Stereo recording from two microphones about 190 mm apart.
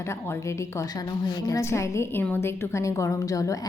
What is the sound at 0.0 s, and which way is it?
A woman's voice, 15° left (ahead or behind).